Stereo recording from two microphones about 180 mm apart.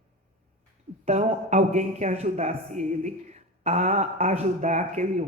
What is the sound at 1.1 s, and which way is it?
Speech, 40° right (ahead or behind).